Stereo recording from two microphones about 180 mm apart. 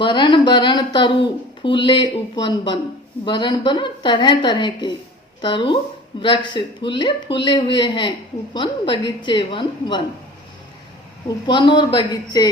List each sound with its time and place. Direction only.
0.0 s a woman's voice: 25° left (ahead or behind)
11.4 s a woman's voice: 25° left (ahead or behind)